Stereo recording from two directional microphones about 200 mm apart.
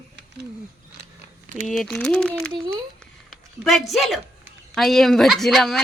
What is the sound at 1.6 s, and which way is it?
Speech, centre (ahead or behind).